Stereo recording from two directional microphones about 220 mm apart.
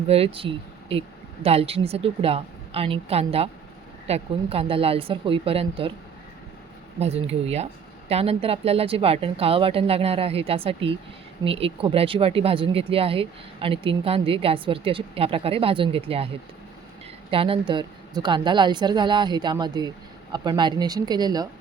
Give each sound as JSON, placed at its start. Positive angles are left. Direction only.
{"t": 0.1, "sound": "speech", "side_deg": -25}
{"t": 7.0, "sound": "speech", "side_deg": -30}
{"t": 17.3, "sound": "speech", "side_deg": -25}